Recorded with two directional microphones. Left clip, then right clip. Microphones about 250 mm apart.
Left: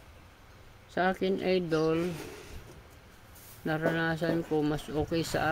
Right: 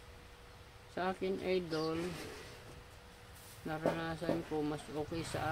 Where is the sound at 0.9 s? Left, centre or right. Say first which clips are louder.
Left 9 dB; left.